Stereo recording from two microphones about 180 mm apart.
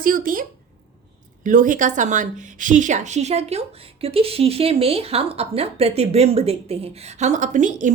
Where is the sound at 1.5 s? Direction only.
45° right (ahead or behind).